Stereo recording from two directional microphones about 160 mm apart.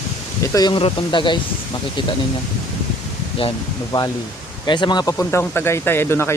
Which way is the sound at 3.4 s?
30° left (ahead or behind).